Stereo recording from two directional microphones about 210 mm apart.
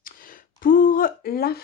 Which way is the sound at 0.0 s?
40° left (ahead or behind).